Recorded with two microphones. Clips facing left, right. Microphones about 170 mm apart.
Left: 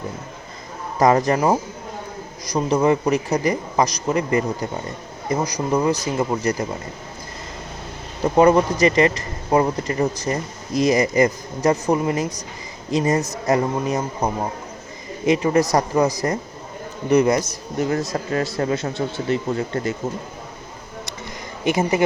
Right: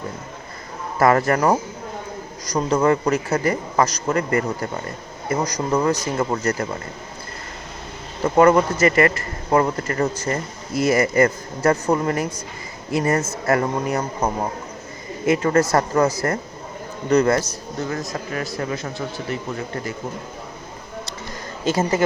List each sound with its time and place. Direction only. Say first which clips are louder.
0.9 s speech: even; 15° left (ahead or behind)
8.2 s speech: even; 15° left (ahead or behind)
15.3 s speech: even; 15° left (ahead or behind)
17.9 s speech: left 5 dB; 30° left (ahead or behind)
21.6 s speech: left 1 dB; 15° left (ahead or behind)